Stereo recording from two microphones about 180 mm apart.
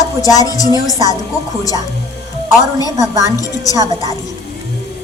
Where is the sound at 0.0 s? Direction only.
20° left (ahead or behind).